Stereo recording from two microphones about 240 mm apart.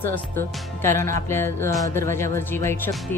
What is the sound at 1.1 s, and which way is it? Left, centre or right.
Speech, centre.